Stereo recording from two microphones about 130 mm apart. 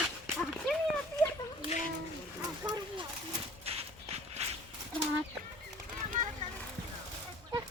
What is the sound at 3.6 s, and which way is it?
Shuffle, 50° right (ahead or behind).